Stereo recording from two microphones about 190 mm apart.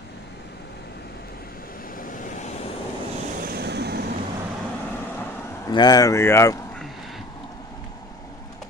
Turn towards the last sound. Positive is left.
turn(degrees=0)  # may be behind; listen again after turning